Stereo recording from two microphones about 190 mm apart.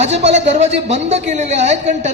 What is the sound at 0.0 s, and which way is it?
Speech, 35° right (ahead or behind).